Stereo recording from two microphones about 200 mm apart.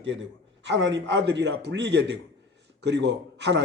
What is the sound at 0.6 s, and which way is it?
A woman's voice, 65° right (ahead or behind).